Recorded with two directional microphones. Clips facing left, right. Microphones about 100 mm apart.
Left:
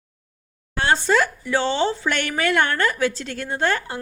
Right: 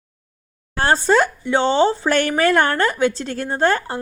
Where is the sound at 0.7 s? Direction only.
40° right (ahead or behind).